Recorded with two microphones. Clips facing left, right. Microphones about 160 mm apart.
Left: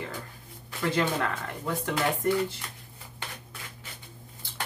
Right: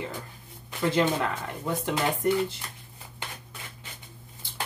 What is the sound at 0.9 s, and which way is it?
Speech, 20° right (ahead or behind).